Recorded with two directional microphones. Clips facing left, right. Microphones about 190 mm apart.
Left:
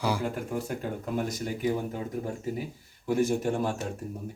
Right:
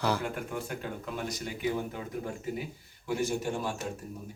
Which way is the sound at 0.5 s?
40° left (ahead or behind).